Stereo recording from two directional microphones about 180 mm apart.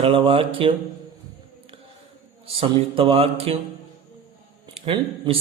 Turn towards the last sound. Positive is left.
turn(degrees=-30)  # may be behind; listen again after turning